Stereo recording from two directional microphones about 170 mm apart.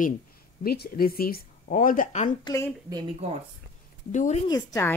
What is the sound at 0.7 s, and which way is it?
Speech, 60° left (ahead or behind).